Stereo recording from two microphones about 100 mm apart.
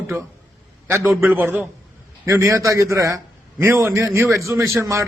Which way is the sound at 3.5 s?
20° right (ahead or behind).